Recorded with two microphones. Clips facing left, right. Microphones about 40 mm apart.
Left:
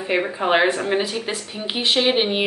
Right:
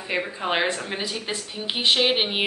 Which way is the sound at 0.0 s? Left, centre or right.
Centre.